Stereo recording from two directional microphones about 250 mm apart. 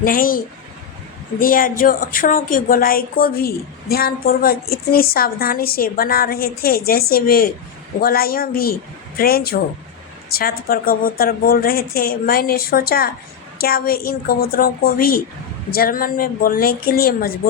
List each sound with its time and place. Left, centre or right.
0.0 s speech: left